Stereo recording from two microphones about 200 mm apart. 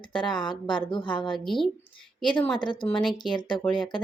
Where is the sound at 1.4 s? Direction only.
Centre (ahead or behind).